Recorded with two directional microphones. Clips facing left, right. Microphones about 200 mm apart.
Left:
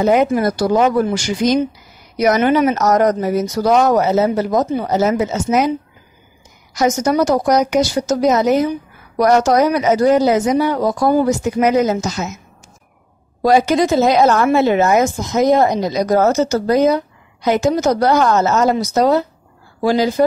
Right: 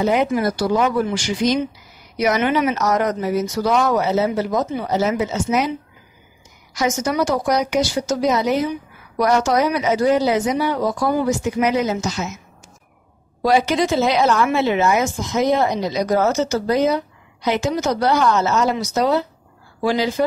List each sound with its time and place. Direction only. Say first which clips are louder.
0.0 s a woman's voice: left 4 dB; 45° left (ahead or behind)
6.7 s a woman's voice: left 5 dB; 40° left (ahead or behind)
13.4 s a woman's voice: left 4 dB; 45° left (ahead or behind)